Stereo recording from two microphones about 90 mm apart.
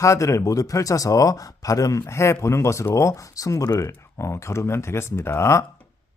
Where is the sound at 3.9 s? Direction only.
30° left (ahead or behind).